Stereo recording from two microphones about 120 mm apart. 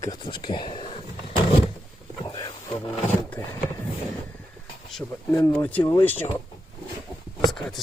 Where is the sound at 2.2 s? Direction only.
30° left (ahead or behind).